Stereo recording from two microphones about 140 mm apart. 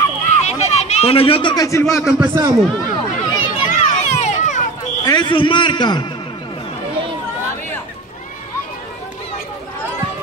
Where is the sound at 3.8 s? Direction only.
60° left (ahead or behind).